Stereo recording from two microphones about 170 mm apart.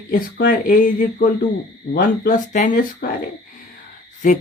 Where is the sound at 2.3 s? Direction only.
50° left (ahead or behind).